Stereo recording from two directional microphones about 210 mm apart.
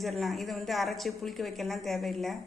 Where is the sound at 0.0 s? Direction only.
Centre (ahead or behind).